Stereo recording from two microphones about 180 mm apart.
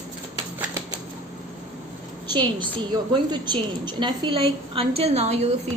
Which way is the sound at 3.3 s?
25° right (ahead or behind).